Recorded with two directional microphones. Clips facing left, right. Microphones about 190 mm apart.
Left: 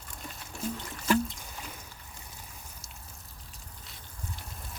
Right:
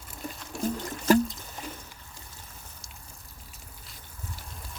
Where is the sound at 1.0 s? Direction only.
40° right (ahead or behind).